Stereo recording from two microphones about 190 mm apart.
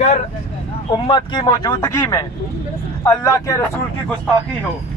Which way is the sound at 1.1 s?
20° left (ahead or behind).